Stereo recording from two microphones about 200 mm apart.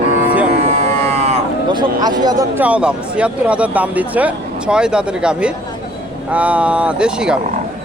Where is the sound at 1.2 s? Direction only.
30° right (ahead or behind).